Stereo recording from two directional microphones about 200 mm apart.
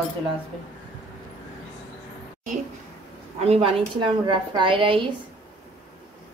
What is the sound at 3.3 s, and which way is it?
A woman's voice, 30° right (ahead or behind).